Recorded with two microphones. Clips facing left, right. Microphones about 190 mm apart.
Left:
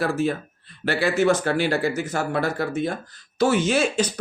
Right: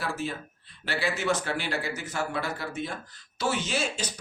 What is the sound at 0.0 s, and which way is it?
Speech, 55° left (ahead or behind).